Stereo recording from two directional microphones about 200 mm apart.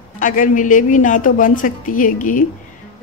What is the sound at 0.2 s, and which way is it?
A woman's voice, 40° left (ahead or behind).